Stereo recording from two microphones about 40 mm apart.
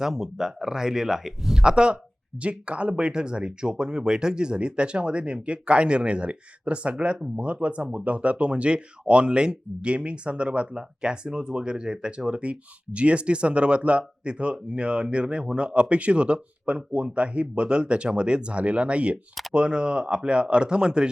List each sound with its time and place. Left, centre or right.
0.0 s speech: centre
1.6 s speech: right